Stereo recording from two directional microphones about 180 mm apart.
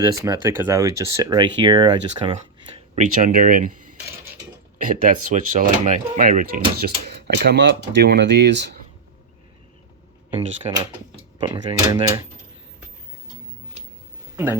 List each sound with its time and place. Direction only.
0.0 s speech: 20° right (ahead or behind)
2.9 s speech: 45° right (ahead or behind); by 8.7 s 75° right (ahead or behind)
11.3 s speech: 25° right (ahead or behind)